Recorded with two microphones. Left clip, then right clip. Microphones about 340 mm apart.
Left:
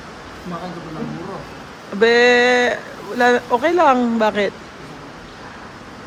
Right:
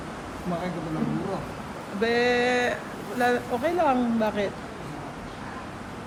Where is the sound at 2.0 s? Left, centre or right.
Centre.